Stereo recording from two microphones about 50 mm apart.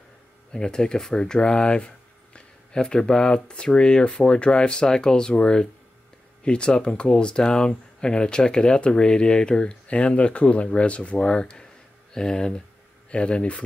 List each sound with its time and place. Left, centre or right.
0.5 s speech: centre